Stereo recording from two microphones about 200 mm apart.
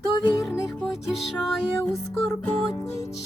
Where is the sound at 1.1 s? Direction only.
Centre (ahead or behind).